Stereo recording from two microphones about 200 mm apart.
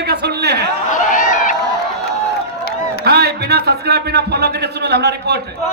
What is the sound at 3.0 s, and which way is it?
A man's voice, 55° right (ahead or behind).